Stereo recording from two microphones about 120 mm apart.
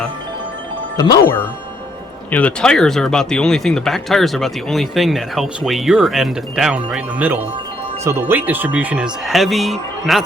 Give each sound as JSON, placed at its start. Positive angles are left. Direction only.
{"t": 0.9, "sound": "speech", "side_deg": 30}
{"t": 2.3, "sound": "speech", "side_deg": 10}